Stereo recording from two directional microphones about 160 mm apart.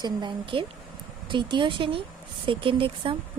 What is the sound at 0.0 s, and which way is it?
Speech, 30° right (ahead or behind).